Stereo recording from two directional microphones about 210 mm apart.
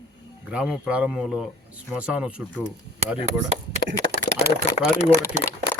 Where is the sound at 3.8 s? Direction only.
45° left (ahead or behind).